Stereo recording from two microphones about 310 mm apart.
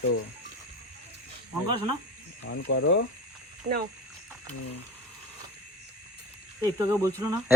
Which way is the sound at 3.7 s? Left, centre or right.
Right.